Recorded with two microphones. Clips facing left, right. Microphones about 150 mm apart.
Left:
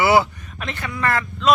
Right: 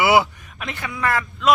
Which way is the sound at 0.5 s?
Centre (ahead or behind).